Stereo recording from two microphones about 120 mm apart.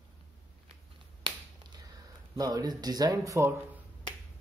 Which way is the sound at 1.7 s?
30° right (ahead or behind).